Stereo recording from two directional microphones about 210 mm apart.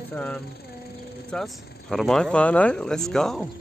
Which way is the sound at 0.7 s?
50° left (ahead or behind).